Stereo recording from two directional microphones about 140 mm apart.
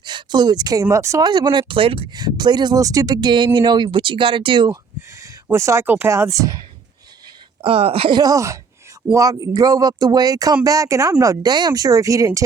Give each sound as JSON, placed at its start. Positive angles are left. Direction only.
{"t": 0.0, "sound": "speech", "side_deg": -30}
{"t": 4.9, "sound": "speech", "side_deg": -20}
{"t": 7.6, "sound": "speech", "side_deg": -45}
{"t": 8.2, "sound": "speech", "side_deg": -25}